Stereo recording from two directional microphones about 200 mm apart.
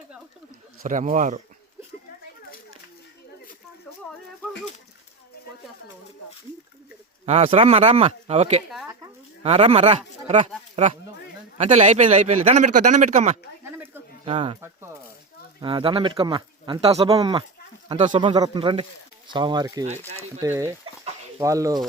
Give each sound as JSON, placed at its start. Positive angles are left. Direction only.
{"t": 0.8, "sound": "speech", "side_deg": -40}
{"t": 7.3, "sound": "speech", "side_deg": -30}
{"t": 13.7, "sound": "a sound", "side_deg": -10}
{"t": 14.3, "sound": "speech", "side_deg": -25}
{"t": 14.6, "sound": "speech", "side_deg": -15}
{"t": 15.6, "sound": "speech", "side_deg": -25}
{"t": 18.1, "sound": "speech", "side_deg": -25}